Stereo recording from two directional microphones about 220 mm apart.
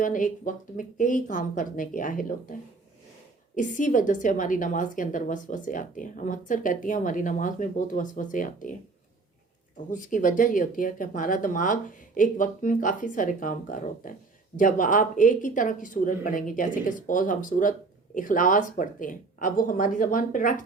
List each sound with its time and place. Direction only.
0.0 s a woman's voice: 35° left (ahead or behind)
9.7 s a woman's voice: 35° left (ahead or behind)